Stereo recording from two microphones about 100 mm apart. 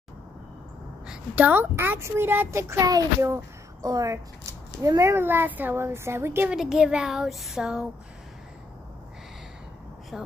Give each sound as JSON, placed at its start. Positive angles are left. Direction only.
{"t": 1.0, "sound": "a child's voice", "side_deg": -10}
{"t": 6.5, "sound": "speech", "side_deg": -5}
{"t": 10.1, "sound": "speech", "side_deg": -5}